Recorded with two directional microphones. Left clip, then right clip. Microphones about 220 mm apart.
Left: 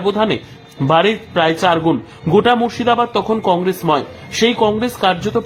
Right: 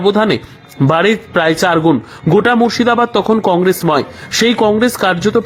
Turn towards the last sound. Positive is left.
turn(degrees=-20)  # may be behind; listen again after turning